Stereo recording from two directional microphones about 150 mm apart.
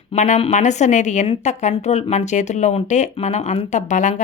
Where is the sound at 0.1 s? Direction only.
50° left (ahead or behind).